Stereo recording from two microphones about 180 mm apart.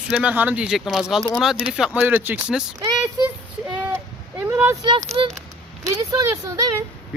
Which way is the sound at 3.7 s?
10° right (ahead or behind).